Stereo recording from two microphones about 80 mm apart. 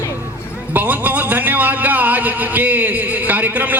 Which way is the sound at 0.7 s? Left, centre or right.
Right.